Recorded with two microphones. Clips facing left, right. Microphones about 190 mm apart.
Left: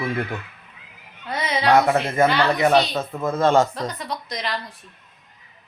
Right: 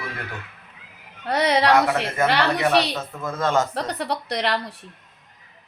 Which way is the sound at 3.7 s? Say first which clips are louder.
Right 2 dB; 70° right (ahead or behind).